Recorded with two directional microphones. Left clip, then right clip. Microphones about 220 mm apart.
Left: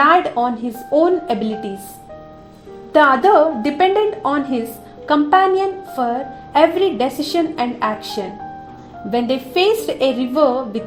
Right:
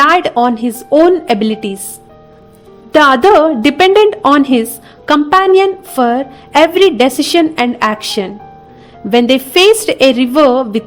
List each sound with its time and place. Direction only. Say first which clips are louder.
0.0 s a woman's voice: right 5 dB; 30° right (ahead or behind)
2.9 s a woman's voice: right 5 dB; 30° right (ahead or behind)